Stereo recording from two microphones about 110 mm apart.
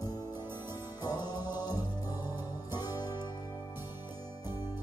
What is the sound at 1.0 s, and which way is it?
Music, 40° left (ahead or behind).